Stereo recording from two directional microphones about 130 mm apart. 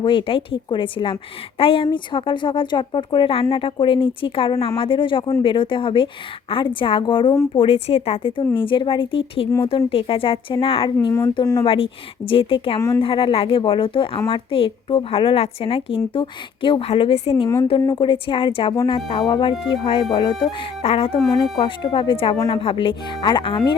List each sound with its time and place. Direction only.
0.0 s speech: 40° left (ahead or behind)
17.8 s speech: 35° left (ahead or behind)